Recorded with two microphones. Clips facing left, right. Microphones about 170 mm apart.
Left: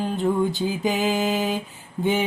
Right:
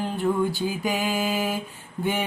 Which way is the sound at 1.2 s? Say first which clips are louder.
Left 3 dB; centre (ahead or behind).